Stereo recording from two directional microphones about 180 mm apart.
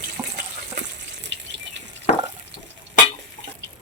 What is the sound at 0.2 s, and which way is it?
Water, 15° right (ahead or behind).